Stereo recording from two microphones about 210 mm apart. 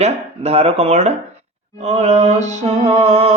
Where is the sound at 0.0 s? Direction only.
30° right (ahead or behind).